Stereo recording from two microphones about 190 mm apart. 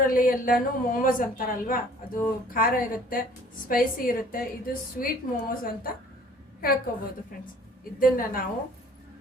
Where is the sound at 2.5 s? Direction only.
50° left (ahead or behind).